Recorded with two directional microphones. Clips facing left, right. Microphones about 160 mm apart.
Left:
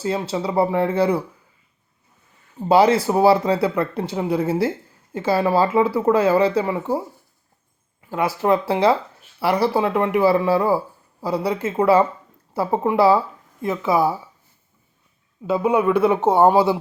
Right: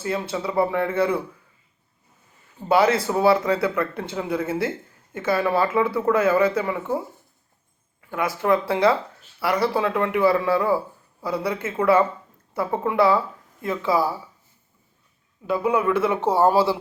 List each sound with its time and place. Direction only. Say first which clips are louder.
0.0 s speech: left 3 dB; 25° left (ahead or behind)
2.6 s speech: left 4 dB; 30° left (ahead or behind)
8.0 s speech: left 3 dB; 25° left (ahead or behind)
15.4 s speech: left 3 dB; 25° left (ahead or behind)